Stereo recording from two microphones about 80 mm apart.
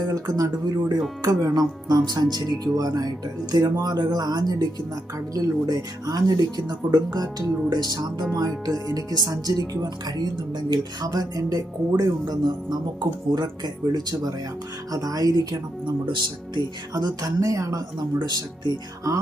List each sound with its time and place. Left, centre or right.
0.1 s speech: right
12.2 s speech: right
15.5 s speech: right
18.2 s speech: right
19.1 s speech: right